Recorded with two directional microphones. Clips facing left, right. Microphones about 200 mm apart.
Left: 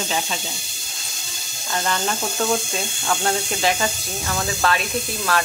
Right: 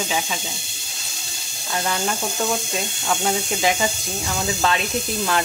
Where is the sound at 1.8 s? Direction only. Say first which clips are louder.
Even; 5° right (ahead or behind).